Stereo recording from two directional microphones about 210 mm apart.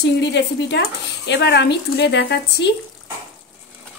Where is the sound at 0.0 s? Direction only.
55° left (ahead or behind).